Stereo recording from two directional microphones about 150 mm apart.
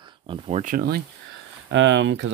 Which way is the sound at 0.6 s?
65° right (ahead or behind).